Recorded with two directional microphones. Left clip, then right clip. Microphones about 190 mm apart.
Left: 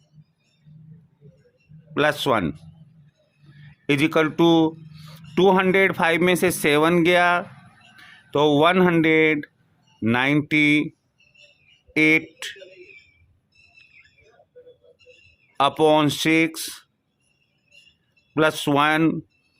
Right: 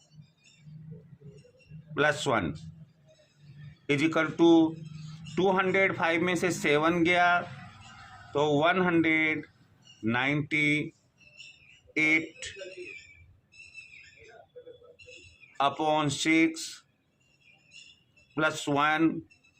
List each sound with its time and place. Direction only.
1.9 s speech: 55° left (ahead or behind)
3.8 s speech: 55° left (ahead or behind)
11.9 s speech: 60° left (ahead or behind)
15.5 s speech: 55° left (ahead or behind)
18.3 s speech: 60° left (ahead or behind)